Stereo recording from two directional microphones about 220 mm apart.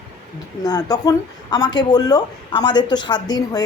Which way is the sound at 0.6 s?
15° left (ahead or behind).